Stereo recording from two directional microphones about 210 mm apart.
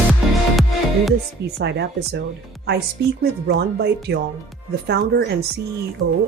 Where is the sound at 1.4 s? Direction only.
55° right (ahead or behind).